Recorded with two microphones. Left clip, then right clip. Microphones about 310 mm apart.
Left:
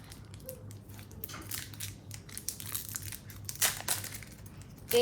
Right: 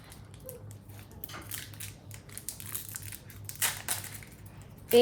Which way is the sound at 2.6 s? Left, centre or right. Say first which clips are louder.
Left 2 dB; centre.